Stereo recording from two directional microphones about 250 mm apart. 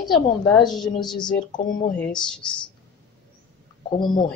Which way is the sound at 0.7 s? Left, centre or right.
Centre.